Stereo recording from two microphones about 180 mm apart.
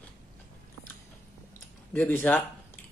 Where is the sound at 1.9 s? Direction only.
10° left (ahead or behind).